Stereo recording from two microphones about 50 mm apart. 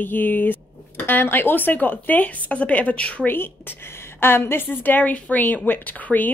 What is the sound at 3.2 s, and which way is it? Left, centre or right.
A woman's voice, left.